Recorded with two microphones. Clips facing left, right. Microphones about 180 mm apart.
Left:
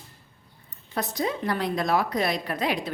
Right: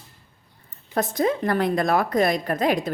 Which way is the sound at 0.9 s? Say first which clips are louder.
Right 6 dB; 50° right (ahead or behind).